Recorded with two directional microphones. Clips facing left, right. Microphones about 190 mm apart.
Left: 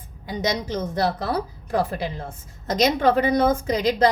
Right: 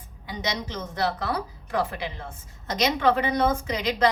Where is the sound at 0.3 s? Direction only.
40° left (ahead or behind).